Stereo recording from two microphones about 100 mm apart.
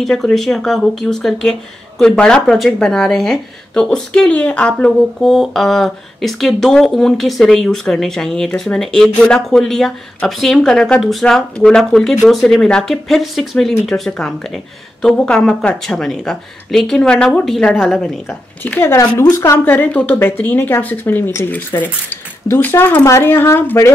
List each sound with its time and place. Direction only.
0.0 s speech: 5° left (ahead or behind)
5.2 s speech: centre (ahead or behind)
18.6 s a woman's voice: 20° left (ahead or behind)